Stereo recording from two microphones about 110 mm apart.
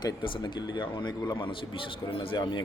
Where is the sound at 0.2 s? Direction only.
45° left (ahead or behind).